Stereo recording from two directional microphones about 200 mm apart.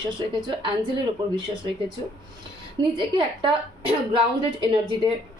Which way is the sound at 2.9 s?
25° right (ahead or behind).